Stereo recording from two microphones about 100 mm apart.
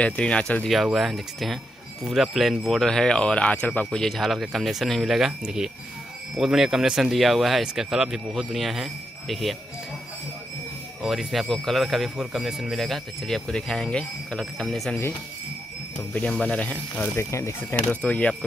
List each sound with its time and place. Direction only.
0.0 s speech: 10° left (ahead or behind)
0.9 s speech: centre (ahead or behind); by 3.8 s 15° left (ahead or behind)
3.9 s speech: 5° left (ahead or behind)
11.0 s speech: 5° right (ahead or behind)
16.1 s speech: 15° left (ahead or behind)
17.1 s speech: 30° left (ahead or behind)